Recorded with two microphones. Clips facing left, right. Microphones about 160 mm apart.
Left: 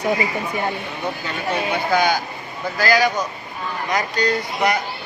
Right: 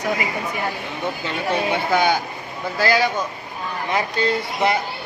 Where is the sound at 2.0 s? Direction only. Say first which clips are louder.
Even; 25° right (ahead or behind).